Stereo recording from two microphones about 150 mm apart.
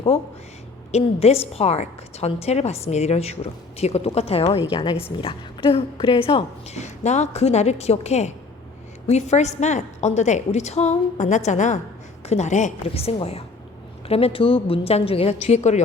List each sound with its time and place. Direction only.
0.1 s a woman's voice: 40° left (ahead or behind)